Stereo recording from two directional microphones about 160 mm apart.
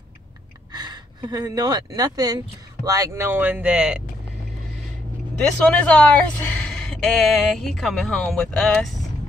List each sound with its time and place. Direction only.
0.7 s speech: 25° right (ahead or behind); by 4.0 s 5° right (ahead or behind)
5.7 s speech: 10° left (ahead or behind)